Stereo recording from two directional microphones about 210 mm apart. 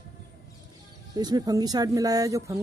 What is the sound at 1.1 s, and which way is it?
Speech, 20° right (ahead or behind).